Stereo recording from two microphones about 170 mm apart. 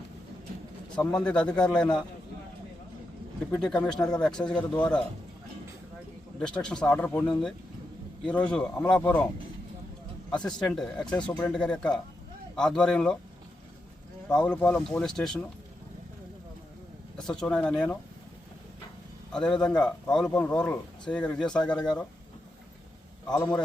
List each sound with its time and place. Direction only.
1.2 s speech: 5° left (ahead or behind)
3.6 s speech: 5° left (ahead or behind)
6.4 s speech: 5° left (ahead or behind)
10.4 s speech: 5° left (ahead or behind)
14.3 s speech: 5° left (ahead or behind)
17.2 s speech: 5° left (ahead or behind)
19.3 s speech: 5° left (ahead or behind)
23.3 s speech: 15° left (ahead or behind)